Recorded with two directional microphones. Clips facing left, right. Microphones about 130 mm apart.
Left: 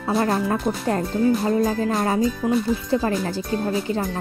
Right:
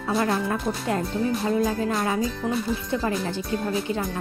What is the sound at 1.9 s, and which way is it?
Speech, 40° left (ahead or behind).